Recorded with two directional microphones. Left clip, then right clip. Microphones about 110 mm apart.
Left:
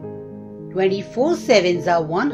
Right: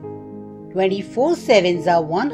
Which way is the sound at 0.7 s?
55° right (ahead or behind).